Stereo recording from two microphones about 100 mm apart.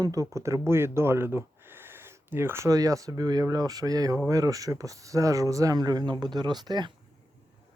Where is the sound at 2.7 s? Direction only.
35° right (ahead or behind).